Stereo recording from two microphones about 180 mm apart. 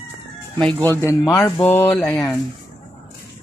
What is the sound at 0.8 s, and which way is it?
Speech, 15° left (ahead or behind).